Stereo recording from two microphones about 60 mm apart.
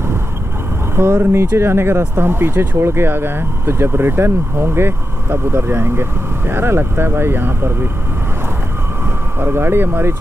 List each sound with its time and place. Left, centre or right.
0.9 s speech: right
9.4 s speech: right